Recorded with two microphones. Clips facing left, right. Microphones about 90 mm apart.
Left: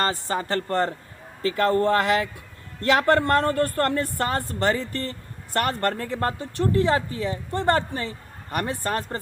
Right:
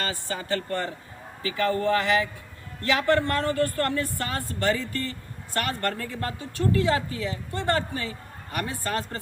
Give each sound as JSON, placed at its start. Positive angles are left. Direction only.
{"t": 0.1, "sound": "a woman's voice", "side_deg": 55}